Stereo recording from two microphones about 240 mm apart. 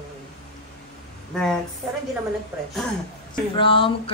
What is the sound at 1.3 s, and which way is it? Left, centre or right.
Speech, centre.